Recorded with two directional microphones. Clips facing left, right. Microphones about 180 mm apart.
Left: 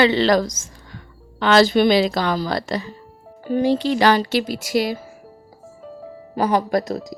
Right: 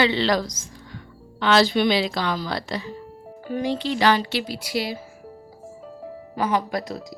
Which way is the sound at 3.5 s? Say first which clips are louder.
Left 6 dB; 30° left (ahead or behind).